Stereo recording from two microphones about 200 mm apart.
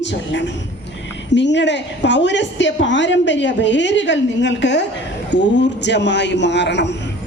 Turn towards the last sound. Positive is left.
turn(degrees=60)  # may be behind; listen again after turning